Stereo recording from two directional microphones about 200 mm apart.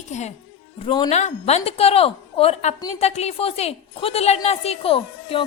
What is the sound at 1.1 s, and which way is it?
A woman's voice, 35° left (ahead or behind).